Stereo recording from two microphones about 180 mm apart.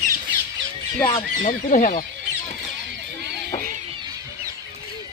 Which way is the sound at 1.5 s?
45° left (ahead or behind).